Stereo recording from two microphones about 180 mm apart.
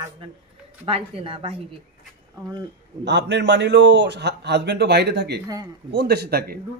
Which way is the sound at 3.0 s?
75° right (ahead or behind).